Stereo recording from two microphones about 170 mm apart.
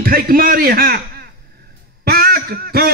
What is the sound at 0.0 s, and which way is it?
A man's voice, 60° right (ahead or behind).